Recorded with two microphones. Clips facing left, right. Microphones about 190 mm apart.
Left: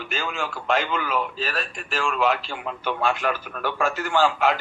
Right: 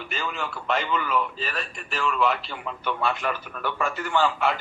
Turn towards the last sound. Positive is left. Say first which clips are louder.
# left 3 dB
turn(degrees=90)